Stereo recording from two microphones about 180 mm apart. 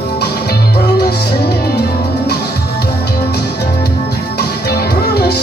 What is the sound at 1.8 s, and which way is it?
Music, 65° left (ahead or behind).